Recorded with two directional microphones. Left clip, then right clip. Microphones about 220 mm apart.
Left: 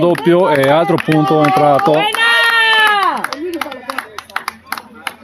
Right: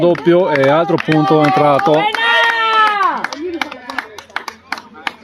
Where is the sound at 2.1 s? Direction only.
50° left (ahead or behind).